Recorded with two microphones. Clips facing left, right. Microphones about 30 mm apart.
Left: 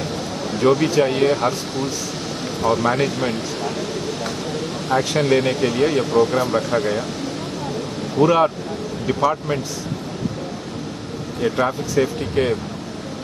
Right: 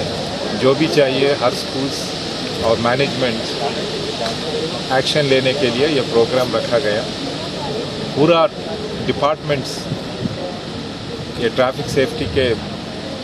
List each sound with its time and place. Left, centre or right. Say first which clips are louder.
0.5 s speech: right 2 dB; right
8.2 s speech: right 3 dB; right
11.4 s a man's voice: right 3 dB; right